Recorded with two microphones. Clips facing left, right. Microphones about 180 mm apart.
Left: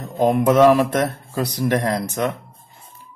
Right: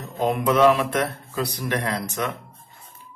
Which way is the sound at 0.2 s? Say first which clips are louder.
Left 4 dB; 35° left (ahead or behind).